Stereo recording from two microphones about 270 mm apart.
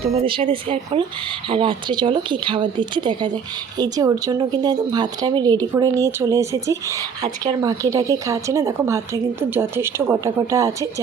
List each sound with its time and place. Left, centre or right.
0.2 s speech: centre